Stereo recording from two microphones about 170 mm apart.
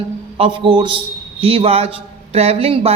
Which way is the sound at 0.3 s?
30° right (ahead or behind).